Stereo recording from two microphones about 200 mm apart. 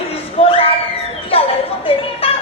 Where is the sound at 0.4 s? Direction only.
30° left (ahead or behind).